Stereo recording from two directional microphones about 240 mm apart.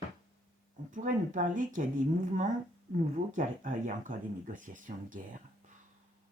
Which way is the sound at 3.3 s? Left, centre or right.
Right.